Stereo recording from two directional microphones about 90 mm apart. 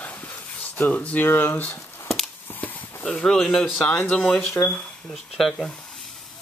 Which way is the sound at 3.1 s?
5° left (ahead or behind).